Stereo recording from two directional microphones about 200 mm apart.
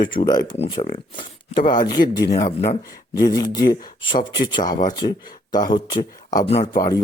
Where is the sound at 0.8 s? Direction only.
40° left (ahead or behind).